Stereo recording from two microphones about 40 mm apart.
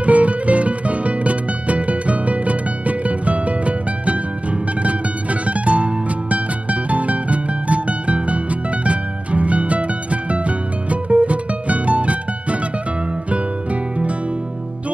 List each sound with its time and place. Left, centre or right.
0.0 s music: right